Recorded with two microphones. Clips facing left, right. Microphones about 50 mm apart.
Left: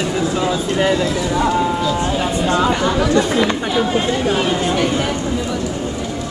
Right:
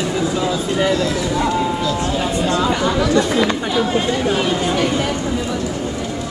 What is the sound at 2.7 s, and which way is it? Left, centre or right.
Speech, centre.